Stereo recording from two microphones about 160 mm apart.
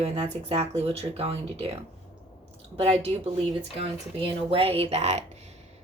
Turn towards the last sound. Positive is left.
turn(degrees=-45)  # may be behind; listen again after turning